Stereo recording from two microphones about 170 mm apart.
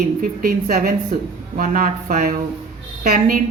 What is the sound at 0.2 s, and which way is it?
Speech, 60° right (ahead or behind).